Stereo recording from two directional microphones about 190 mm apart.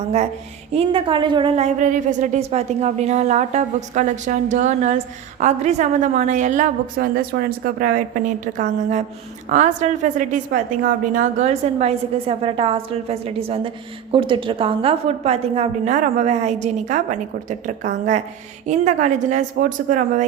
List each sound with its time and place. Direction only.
0.7 s a woman's voice: 30° right (ahead or behind)